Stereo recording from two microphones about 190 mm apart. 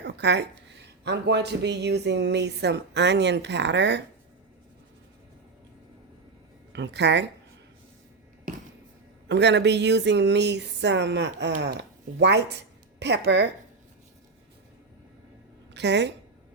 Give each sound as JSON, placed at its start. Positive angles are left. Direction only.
{"t": 0.0, "sound": "speech", "side_deg": -65}
{"t": 6.7, "sound": "speech", "side_deg": -65}
{"t": 9.3, "sound": "speech", "side_deg": -65}
{"t": 15.7, "sound": "a woman's voice", "side_deg": -65}